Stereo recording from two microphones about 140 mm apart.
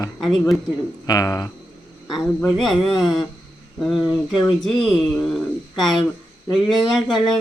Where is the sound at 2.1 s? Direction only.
Centre (ahead or behind).